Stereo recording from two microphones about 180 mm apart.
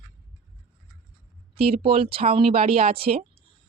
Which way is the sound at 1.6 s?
35° right (ahead or behind).